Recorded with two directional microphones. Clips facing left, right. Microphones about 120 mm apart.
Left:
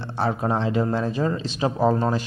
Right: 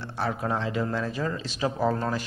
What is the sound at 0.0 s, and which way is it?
A man's voice, 30° left (ahead or behind).